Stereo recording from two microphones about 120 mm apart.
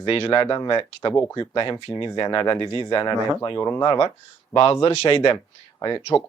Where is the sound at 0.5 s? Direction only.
40° left (ahead or behind).